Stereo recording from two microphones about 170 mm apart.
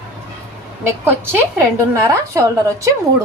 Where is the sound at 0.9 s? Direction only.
15° right (ahead or behind).